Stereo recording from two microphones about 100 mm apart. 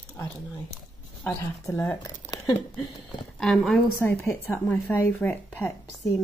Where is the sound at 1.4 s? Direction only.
30° left (ahead or behind).